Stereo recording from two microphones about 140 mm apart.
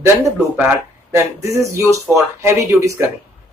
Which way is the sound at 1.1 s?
20° right (ahead or behind).